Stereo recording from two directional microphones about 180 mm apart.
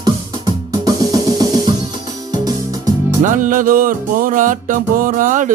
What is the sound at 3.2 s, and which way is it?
Music, 45° right (ahead or behind).